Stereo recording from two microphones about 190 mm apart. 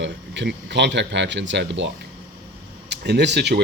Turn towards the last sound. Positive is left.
turn(degrees=-60)  # may be behind; listen again after turning